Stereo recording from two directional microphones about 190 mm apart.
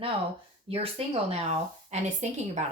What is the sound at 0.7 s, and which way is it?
A woman's voice, 30° right (ahead or behind).